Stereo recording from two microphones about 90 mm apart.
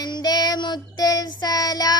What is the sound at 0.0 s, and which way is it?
Child singing, 50° left (ahead or behind).